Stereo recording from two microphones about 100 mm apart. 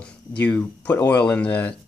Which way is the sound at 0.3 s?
15° left (ahead or behind).